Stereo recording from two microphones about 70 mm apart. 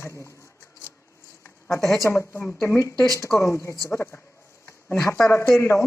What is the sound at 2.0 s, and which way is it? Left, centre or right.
Speech, left.